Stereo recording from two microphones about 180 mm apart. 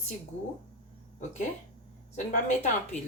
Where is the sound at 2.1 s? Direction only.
45° left (ahead or behind).